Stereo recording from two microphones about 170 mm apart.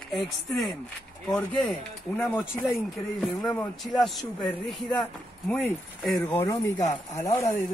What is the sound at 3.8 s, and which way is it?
A man's voice, centre (ahead or behind).